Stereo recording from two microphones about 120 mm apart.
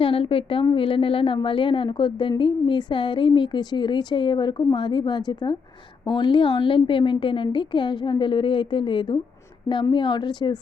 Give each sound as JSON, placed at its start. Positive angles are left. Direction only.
{"t": 0.0, "sound": "a woman's voice", "side_deg": 50}